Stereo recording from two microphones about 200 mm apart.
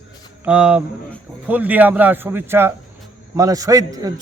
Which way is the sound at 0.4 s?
5° right (ahead or behind).